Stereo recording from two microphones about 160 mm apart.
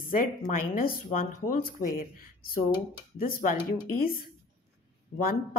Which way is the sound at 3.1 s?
65° left (ahead or behind).